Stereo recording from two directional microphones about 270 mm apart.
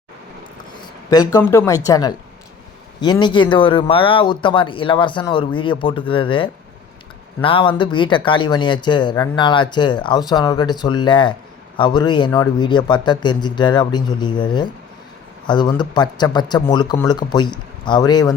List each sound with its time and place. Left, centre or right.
1.1 s speech: centre